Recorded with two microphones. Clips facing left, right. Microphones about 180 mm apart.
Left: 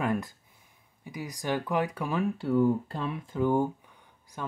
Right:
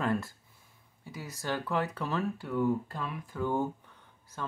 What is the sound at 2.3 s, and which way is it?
Speech, 30° left (ahead or behind).